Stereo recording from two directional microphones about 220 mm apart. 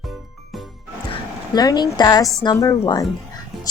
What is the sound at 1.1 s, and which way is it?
A woman's voice, 20° left (ahead or behind).